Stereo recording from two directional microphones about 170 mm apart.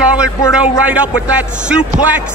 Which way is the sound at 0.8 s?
10° right (ahead or behind).